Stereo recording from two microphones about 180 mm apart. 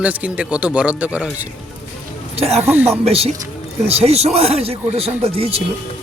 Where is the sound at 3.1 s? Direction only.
35° right (ahead or behind).